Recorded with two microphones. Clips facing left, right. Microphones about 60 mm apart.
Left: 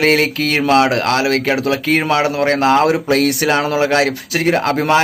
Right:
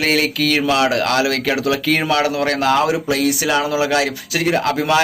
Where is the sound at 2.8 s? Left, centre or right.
Left.